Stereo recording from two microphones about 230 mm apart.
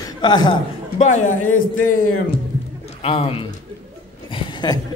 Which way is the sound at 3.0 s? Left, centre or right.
Left.